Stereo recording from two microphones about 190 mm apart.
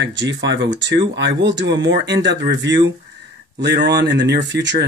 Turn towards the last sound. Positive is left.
turn(degrees=-70)  # may be behind; listen again after turning